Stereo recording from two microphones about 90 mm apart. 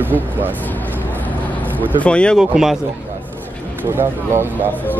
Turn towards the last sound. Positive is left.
turn(degrees=-30)  # may be behind; listen again after turning